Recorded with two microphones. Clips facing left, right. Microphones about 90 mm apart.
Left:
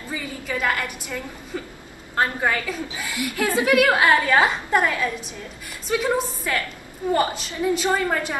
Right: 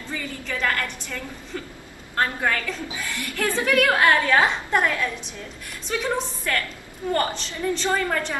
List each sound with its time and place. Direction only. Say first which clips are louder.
0.1 s a woman's voice: left 2 dB; 10° left (ahead or behind)